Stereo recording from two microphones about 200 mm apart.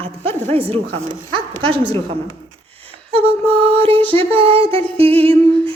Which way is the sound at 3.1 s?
30° right (ahead or behind).